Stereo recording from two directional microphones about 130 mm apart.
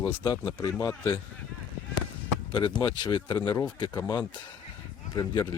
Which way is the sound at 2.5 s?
40° left (ahead or behind).